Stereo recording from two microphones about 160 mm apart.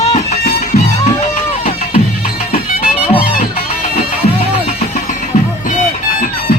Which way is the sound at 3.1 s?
35° left (ahead or behind).